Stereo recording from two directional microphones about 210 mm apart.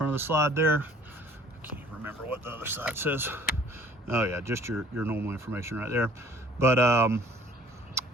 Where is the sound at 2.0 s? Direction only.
10° right (ahead or behind).